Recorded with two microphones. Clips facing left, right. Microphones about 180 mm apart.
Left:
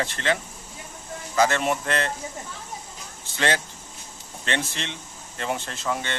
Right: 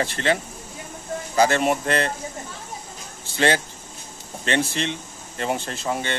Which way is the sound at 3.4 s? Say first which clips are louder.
Right 4 dB; 30° right (ahead or behind).